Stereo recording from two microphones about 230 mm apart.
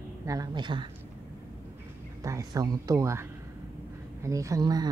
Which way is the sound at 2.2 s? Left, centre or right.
Centre.